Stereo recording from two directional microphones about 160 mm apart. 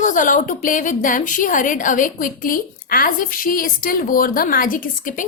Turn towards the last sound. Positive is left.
turn(degrees=55)  # may be behind; listen again after turning